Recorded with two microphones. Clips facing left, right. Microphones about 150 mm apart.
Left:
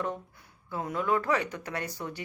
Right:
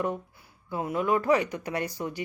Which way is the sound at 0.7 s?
15° right (ahead or behind).